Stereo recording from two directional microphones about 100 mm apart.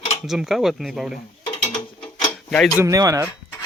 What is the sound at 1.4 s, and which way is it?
Mechanisms, 60° left (ahead or behind).